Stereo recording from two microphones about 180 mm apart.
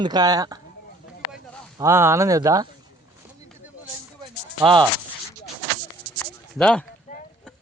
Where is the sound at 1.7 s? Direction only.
15° right (ahead or behind).